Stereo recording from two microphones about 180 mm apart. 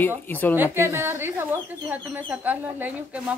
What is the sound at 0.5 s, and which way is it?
Speech, 10° right (ahead or behind).